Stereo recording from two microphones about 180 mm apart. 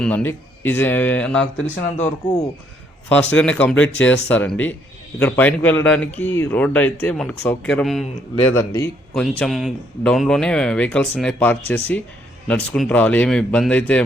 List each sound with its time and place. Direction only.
0.0 s speech: 10° left (ahead or behind)
1.7 s speech: 45° left (ahead or behind)
3.1 s speech: 10° left (ahead or behind)
8.4 s speech: 15° left (ahead or behind)